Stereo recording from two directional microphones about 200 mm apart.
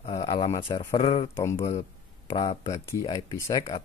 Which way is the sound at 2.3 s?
30° left (ahead or behind).